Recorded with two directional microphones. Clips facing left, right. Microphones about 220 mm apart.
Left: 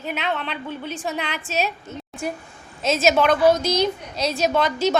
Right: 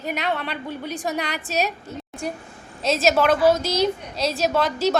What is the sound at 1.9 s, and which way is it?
Speech, 35° right (ahead or behind).